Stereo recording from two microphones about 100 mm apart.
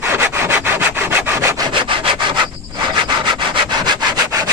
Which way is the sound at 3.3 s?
50° right (ahead or behind).